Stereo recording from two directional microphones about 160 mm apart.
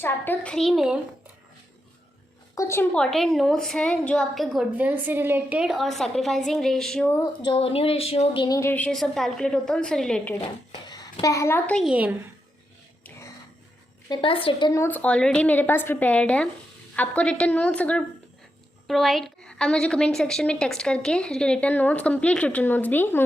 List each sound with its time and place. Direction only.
0.0 s a woman's voice: 10° left (ahead or behind)
2.6 s a woman's voice: 15° left (ahead or behind)
2.9 s a woman's voice: 5° left (ahead or behind)
4.4 s a woman's voice: 10° right (ahead or behind); by 7.3 s 10° left (ahead or behind)
7.4 s a sound: 35° left (ahead or behind)
8.7 s a woman's voice: 5° left (ahead or behind)
10.7 s a sound: 25° left (ahead or behind)
11.7 s a woman's voice: 5° right (ahead or behind)
14.1 s a sound: 35° left (ahead or behind)
14.7 s a woman's voice: 15° left (ahead or behind)